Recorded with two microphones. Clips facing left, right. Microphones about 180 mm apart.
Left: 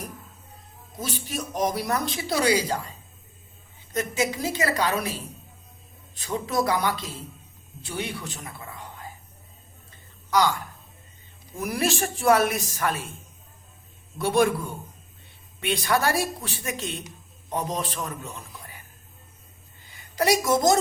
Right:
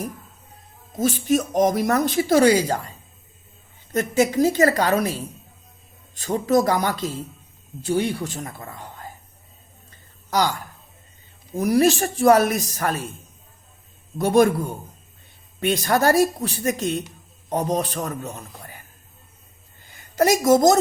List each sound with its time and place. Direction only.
0.9 s speech: 45° right (ahead or behind)
4.2 s speech: 45° right (ahead or behind)
6.1 s a man's voice: 45° right (ahead or behind)
10.2 s speech: 40° right (ahead or behind)
11.5 s a man's voice: 35° right (ahead or behind)
14.2 s a man's voice: 40° right (ahead or behind)
19.8 s a sound: 45° right (ahead or behind)